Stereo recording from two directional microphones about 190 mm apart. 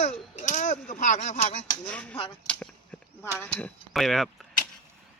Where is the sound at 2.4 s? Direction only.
5° left (ahead or behind).